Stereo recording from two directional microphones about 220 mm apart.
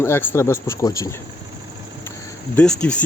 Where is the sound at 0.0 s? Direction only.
10° left (ahead or behind).